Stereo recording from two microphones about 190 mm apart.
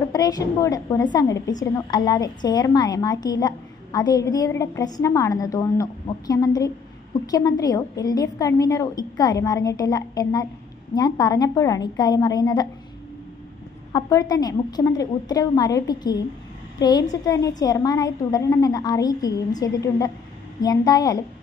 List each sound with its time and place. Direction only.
0.1 s a woman's voice: 20° left (ahead or behind)
13.9 s a woman's voice: 20° left (ahead or behind)